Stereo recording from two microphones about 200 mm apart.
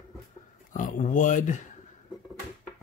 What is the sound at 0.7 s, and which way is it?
Speech, 40° left (ahead or behind).